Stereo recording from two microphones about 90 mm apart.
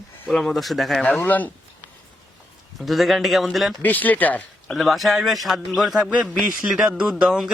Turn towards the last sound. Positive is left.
turn(degrees=-5)  # may be behind; listen again after turning